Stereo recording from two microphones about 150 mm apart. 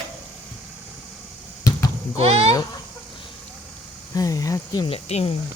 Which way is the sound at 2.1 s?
45° right (ahead or behind).